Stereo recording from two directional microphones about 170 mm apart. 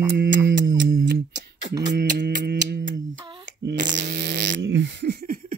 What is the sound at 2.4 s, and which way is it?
Speech, 70° right (ahead or behind).